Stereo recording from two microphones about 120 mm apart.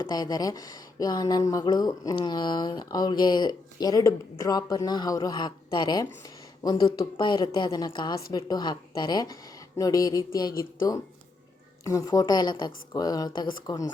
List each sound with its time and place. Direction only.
0.0 s speech: 35° left (ahead or behind)